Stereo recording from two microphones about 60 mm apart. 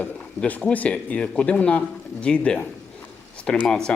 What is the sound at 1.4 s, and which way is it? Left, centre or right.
Speech, centre.